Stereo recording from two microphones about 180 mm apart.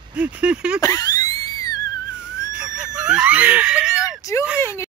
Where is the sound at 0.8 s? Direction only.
20° left (ahead or behind).